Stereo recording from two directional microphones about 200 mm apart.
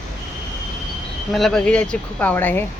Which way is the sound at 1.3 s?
Centre (ahead or behind).